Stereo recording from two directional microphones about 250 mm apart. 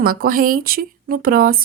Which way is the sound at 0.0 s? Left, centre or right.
Right.